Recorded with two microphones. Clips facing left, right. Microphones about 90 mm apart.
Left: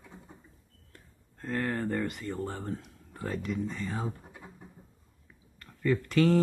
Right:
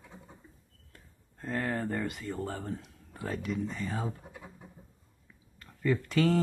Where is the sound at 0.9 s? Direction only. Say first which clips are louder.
Left 2 dB; 15° right (ahead or behind).